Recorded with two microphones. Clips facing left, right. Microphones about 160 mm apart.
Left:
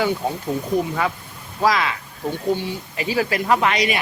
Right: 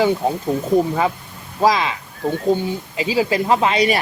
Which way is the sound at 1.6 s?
20° right (ahead or behind).